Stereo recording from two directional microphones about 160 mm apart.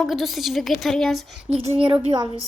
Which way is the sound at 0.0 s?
Centre (ahead or behind).